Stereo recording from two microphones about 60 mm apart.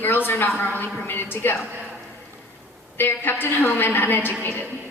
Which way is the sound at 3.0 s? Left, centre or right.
Left.